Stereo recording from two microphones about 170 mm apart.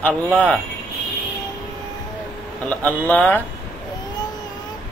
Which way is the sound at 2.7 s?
10° left (ahead or behind).